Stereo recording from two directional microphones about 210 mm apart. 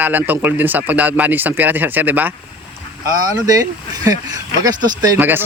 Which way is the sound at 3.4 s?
15° right (ahead or behind).